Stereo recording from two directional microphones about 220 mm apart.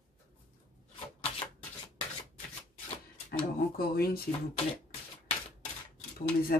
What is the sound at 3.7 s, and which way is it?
Speech, 45° left (ahead or behind).